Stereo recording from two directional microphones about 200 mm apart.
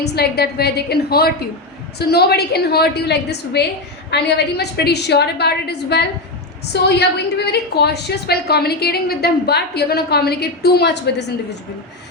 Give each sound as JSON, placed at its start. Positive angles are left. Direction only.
{"t": 0.0, "sound": "a woman's voice", "side_deg": 55}